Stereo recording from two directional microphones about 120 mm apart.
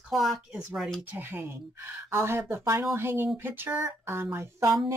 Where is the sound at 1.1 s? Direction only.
20° right (ahead or behind).